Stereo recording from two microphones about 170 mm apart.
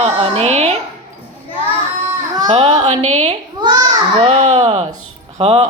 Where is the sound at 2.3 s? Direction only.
25° right (ahead or behind).